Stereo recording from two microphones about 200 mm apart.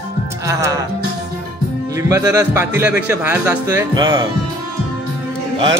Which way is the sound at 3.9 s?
20° right (ahead or behind).